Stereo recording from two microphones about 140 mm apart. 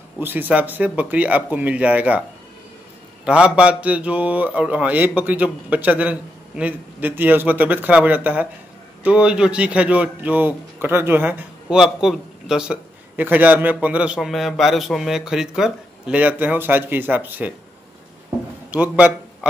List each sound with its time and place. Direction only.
0.2 s speech: 15° right (ahead or behind)
3.3 s speech: 10° right (ahead or behind)
18.7 s a man's voice: 10° right (ahead or behind)